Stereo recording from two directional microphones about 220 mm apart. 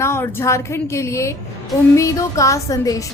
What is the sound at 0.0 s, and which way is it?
Speech, 10° left (ahead or behind).